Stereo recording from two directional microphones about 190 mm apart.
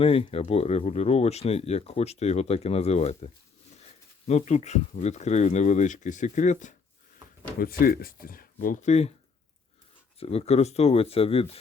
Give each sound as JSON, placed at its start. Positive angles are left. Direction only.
{"t": 0.0, "sound": "speech", "side_deg": 30}
{"t": 4.3, "sound": "speech", "side_deg": 35}
{"t": 10.2, "sound": "speech", "side_deg": 30}